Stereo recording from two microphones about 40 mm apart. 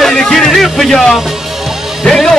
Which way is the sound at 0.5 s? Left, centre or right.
Centre.